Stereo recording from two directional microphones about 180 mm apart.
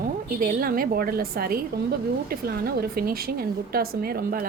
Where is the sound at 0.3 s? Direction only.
50° right (ahead or behind).